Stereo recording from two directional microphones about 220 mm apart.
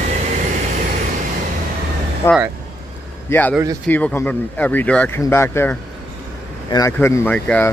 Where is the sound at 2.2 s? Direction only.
10° left (ahead or behind).